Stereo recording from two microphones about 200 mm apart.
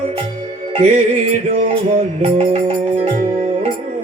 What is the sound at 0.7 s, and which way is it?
Music, 30° right (ahead or behind).